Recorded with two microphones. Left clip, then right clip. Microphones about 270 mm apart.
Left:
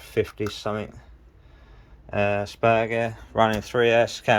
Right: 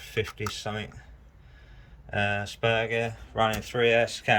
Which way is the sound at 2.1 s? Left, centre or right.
Centre.